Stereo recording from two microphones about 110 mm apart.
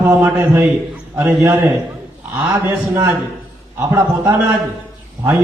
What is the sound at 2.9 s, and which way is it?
Speech, 25° right (ahead or behind).